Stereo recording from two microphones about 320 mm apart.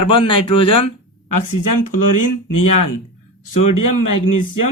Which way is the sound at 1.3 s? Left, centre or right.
Left.